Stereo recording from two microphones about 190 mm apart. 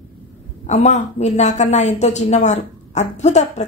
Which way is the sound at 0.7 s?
40° left (ahead or behind).